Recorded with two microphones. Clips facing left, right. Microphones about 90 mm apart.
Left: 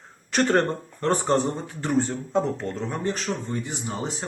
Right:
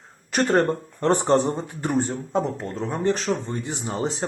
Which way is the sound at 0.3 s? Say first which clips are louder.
Right 1 dB; 10° right (ahead or behind).